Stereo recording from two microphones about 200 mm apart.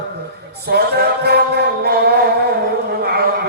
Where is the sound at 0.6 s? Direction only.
55° right (ahead or behind).